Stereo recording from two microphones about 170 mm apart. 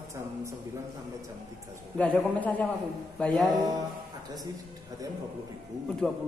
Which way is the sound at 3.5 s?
25° right (ahead or behind).